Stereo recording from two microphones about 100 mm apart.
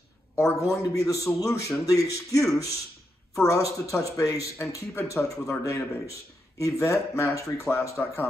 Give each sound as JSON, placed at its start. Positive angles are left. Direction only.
{"t": 0.4, "sound": "speech", "side_deg": 30}